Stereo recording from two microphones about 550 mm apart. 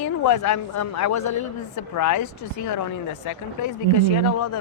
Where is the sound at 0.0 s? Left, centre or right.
Left.